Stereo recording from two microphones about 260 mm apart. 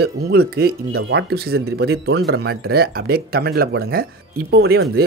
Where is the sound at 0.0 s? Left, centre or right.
Right.